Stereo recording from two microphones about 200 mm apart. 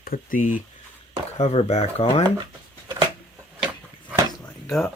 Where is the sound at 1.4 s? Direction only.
30° left (ahead or behind).